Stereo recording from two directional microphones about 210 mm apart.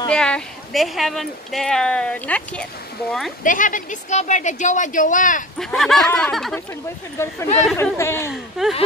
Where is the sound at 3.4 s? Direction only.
40° left (ahead or behind).